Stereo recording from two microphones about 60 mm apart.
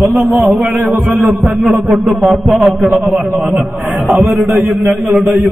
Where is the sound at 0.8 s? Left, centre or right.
Right.